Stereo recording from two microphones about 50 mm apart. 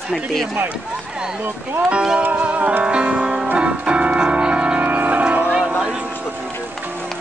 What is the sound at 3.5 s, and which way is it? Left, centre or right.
Keyboard, right.